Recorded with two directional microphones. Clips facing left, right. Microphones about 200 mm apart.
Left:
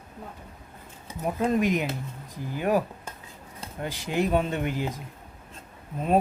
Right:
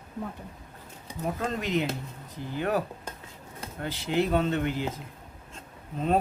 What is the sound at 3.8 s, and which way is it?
Speech, 15° left (ahead or behind).